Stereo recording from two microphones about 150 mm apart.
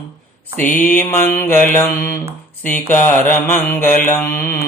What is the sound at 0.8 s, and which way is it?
Mantra, 10° left (ahead or behind).